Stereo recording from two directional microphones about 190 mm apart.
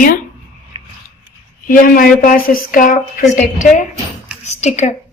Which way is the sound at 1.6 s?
45° left (ahead or behind).